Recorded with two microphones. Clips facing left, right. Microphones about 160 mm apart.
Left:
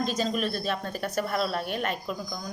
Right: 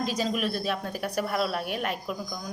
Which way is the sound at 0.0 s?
10° right (ahead or behind).